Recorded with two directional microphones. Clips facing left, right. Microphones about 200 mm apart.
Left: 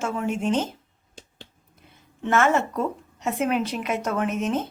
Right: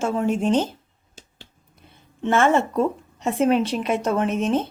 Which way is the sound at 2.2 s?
30° right (ahead or behind).